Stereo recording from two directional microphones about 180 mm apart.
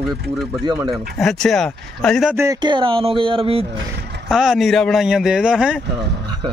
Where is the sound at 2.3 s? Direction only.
15° right (ahead or behind).